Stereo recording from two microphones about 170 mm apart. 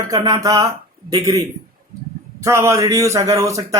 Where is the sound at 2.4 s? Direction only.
15° right (ahead or behind).